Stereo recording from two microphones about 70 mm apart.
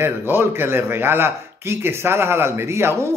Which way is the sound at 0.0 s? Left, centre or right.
Right.